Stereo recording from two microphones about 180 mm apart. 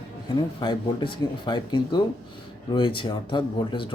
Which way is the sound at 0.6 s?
25° left (ahead or behind).